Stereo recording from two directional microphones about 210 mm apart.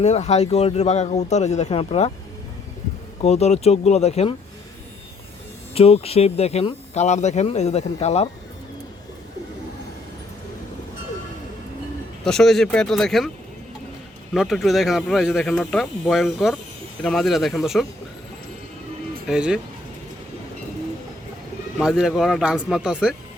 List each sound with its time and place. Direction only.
0.0 s a man's voice: 30° left (ahead or behind)
3.2 s a man's voice: 30° left (ahead or behind)
5.7 s speech: 30° left (ahead or behind)
12.2 s speech: centre (ahead or behind)
14.3 s speech: centre (ahead or behind)
19.3 s speech: 5° right (ahead or behind)
21.8 s speech: centre (ahead or behind)